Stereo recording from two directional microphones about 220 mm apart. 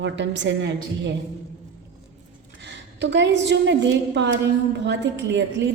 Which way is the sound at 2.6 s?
50° right (ahead or behind).